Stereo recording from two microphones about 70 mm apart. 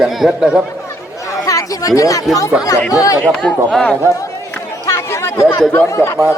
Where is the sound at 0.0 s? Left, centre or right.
Centre.